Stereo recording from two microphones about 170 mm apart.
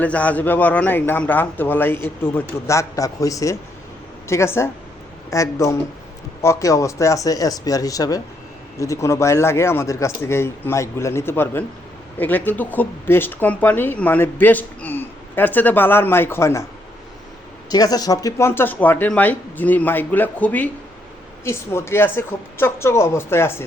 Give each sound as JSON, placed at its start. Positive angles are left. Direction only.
{"t": 0.0, "sound": "speech", "side_deg": 10}
{"t": 17.7, "sound": "speech", "side_deg": 20}